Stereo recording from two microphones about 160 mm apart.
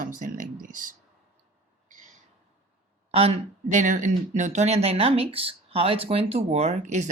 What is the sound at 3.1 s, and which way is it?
Speech, 40° right (ahead or behind).